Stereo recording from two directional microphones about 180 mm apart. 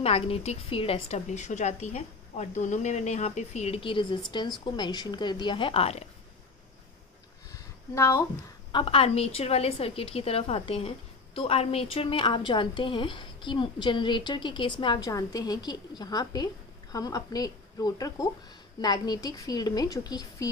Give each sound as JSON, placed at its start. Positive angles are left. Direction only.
{"t": 0.0, "sound": "a woman's voice", "side_deg": 35}
{"t": 7.9, "sound": "speech", "side_deg": 15}
{"t": 8.7, "sound": "a woman's voice", "side_deg": 30}